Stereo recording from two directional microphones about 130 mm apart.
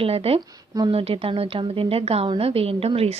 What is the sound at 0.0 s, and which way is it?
A woman's voice, 50° right (ahead or behind).